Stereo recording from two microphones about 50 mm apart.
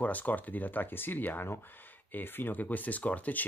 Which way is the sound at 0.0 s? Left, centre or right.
Left.